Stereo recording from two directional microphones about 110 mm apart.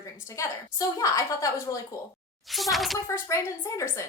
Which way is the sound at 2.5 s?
Centre (ahead or behind).